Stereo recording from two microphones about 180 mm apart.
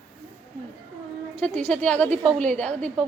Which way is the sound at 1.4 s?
5° left (ahead or behind).